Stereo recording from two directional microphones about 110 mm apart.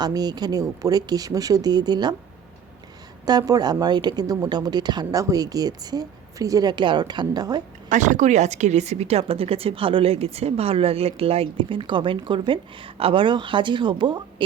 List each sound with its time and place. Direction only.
0.0 s a woman's voice: 40° right (ahead or behind)
3.2 s a woman's voice: 35° right (ahead or behind)
7.9 s a woman's voice: 90° right; by 14.4 s 45° right (ahead or behind)